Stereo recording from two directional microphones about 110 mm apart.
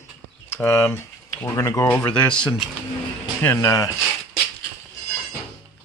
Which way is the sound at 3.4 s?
25° left (ahead or behind).